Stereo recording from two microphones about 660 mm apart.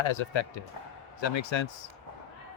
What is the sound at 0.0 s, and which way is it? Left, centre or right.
A man's voice, left.